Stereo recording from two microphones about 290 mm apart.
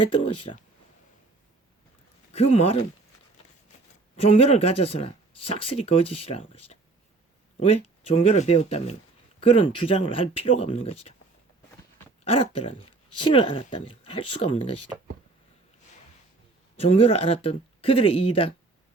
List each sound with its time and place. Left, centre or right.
2.3 s speech: left
4.2 s speech: centre
12.2 s speech: centre
16.7 s speech: left